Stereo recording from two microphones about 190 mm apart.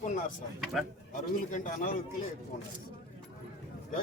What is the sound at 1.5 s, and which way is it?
Speech, 45° left (ahead or behind).